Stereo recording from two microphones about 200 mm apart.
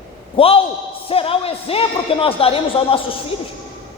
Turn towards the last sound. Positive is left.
turn(degrees=30)  # may be behind; listen again after turning